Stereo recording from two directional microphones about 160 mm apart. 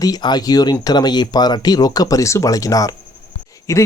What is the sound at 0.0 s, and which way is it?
Speech, 25° left (ahead or behind).